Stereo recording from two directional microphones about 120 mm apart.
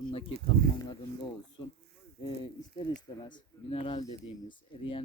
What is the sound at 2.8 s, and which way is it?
Speech, 45° left (ahead or behind).